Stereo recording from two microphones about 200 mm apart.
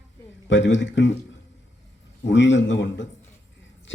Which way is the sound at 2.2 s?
65° left (ahead or behind).